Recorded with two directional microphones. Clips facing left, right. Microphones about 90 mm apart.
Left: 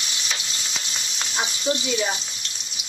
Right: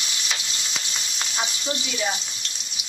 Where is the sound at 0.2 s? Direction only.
35° left (ahead or behind).